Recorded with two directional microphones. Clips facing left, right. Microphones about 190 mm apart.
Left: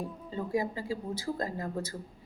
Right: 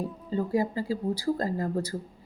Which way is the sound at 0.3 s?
35° right (ahead or behind).